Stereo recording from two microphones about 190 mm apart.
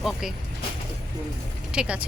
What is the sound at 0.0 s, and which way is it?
Speech, centre (ahead or behind).